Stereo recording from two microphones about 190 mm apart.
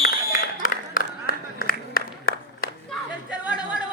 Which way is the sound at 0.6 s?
45° left (ahead or behind).